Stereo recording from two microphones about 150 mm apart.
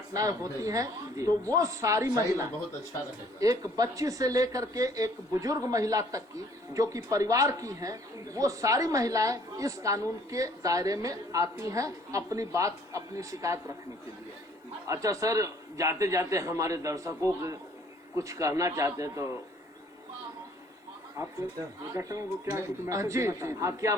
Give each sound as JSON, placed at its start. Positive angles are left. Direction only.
{"t": 0.1, "sound": "speech", "side_deg": -25}
{"t": 14.8, "sound": "speech", "side_deg": -20}
{"t": 21.9, "sound": "speech", "side_deg": -20}